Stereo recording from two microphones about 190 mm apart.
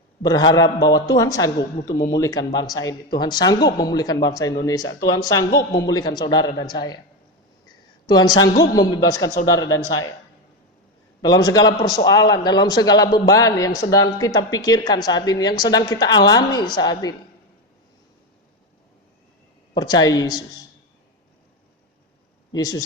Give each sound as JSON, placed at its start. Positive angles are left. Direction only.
{"t": 0.2, "sound": "speech", "side_deg": 20}
{"t": 8.0, "sound": "speech", "side_deg": 20}
{"t": 9.6, "sound": "speech", "side_deg": 90}
{"t": 11.2, "sound": "speech", "side_deg": 20}
{"t": 19.7, "sound": "speech", "side_deg": 20}
{"t": 22.5, "sound": "speech", "side_deg": 20}